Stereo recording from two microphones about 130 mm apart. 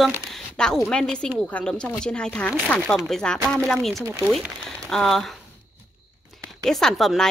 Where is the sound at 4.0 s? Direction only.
20° right (ahead or behind).